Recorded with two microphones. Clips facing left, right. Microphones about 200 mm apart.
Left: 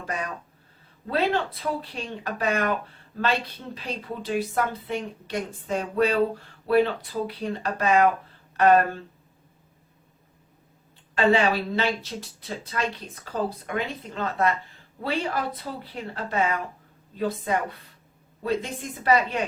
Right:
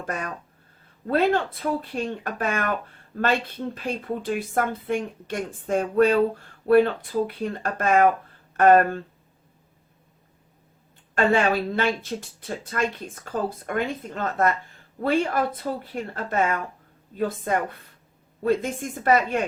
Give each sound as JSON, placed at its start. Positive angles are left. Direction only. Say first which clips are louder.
{"t": 1.0, "sound": "a woman's voice", "louder": "right 3 dB", "side_deg": -50}
{"t": 11.1, "sound": "a woman's voice", "louder": "even", "side_deg": -50}